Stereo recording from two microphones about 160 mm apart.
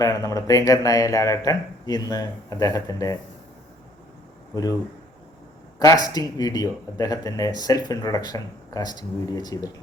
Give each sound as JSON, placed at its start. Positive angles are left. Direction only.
{"t": 0.0, "sound": "speech", "side_deg": 20}
{"t": 5.8, "sound": "speech", "side_deg": 25}